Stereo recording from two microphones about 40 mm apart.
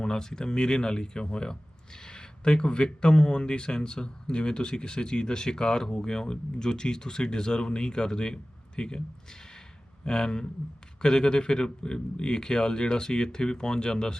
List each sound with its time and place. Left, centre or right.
0.0 s speech: centre
10.1 s speech: centre